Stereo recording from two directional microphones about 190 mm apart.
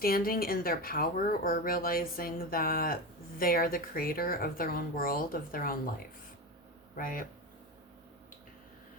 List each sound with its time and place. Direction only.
0.0 s speech: 50° left (ahead or behind)
6.9 s speech: 45° left (ahead or behind)